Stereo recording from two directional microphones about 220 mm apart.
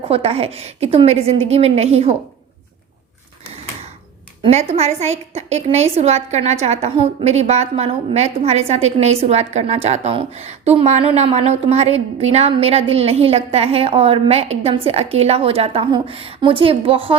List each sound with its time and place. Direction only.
0.1 s a woman's voice: 25° right (ahead or behind)
4.4 s a woman's voice: 30° right (ahead or behind)